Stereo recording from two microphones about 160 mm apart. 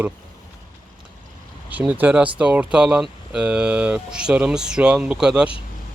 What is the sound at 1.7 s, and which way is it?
Speech, 10° right (ahead or behind).